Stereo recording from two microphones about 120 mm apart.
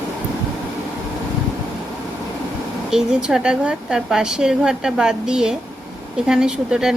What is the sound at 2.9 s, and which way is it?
A woman's voice, 5° right (ahead or behind).